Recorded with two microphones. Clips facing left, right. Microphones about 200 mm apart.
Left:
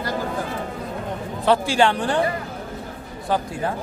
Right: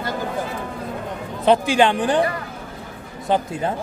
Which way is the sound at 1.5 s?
20° right (ahead or behind).